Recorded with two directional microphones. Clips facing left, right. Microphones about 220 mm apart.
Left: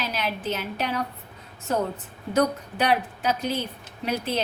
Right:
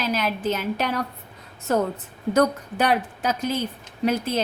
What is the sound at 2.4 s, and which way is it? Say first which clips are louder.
A woman's voice: right 2 dB; 45° right (ahead or behind).